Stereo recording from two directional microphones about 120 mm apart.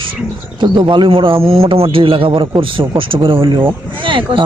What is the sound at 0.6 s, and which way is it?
A man's voice, 40° right (ahead or behind).